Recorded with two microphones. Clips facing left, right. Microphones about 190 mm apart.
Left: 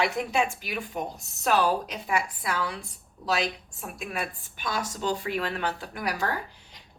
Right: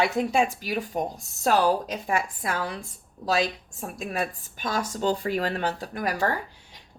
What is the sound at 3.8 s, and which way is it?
A woman's voice, 40° right (ahead or behind).